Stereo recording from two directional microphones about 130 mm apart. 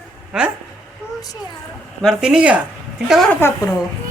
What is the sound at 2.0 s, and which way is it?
Speech, centre (ahead or behind).